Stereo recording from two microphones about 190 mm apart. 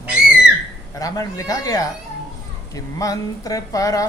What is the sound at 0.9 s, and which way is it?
A woman's voice, 20° left (ahead or behind).